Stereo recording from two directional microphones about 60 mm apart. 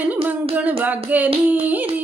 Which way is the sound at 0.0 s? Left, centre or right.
Right.